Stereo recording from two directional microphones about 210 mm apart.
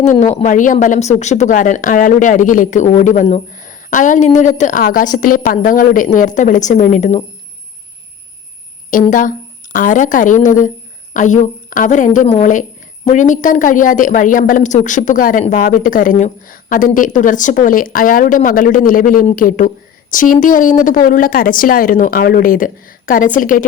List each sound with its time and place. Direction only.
0.0 s a woman's voice: 35° left (ahead or behind)
8.9 s a woman's voice: 40° left (ahead or behind)